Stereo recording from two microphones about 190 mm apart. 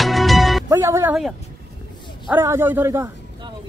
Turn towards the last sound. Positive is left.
turn(degrees=-15)  # may be behind; listen again after turning